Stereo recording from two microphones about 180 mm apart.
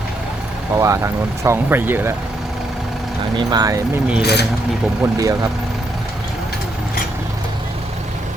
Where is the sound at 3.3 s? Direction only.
20° right (ahead or behind).